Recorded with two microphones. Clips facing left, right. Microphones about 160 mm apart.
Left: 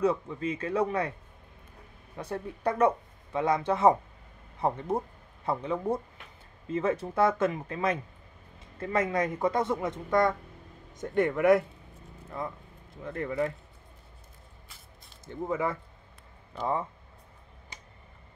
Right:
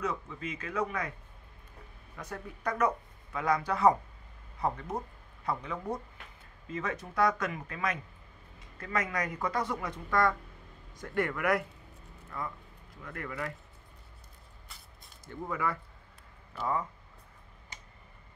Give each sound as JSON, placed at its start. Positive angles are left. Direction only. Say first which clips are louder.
{"t": 0.0, "sound": "speech", "louder": "left 8 dB", "side_deg": 30}
{"t": 2.1, "sound": "speech", "louder": "left 6 dB", "side_deg": 30}
{"t": 15.2, "sound": "speech", "louder": "left 4 dB", "side_deg": 25}